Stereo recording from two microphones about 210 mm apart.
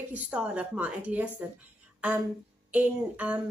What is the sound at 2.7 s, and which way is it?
Speech, 5° right (ahead or behind).